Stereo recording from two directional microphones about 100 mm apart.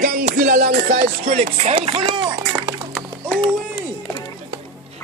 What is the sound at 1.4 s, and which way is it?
Speech, 85° right.